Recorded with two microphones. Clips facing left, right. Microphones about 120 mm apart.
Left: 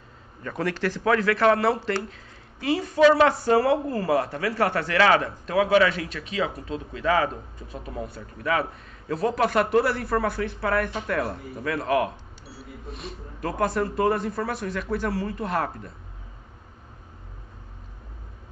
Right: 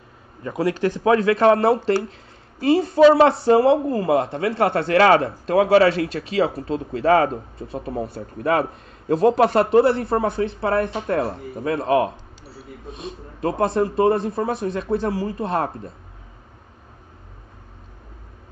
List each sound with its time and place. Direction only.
0.4 s speech: 15° right (ahead or behind)
2.6 s a man's voice: 30° right (ahead or behind)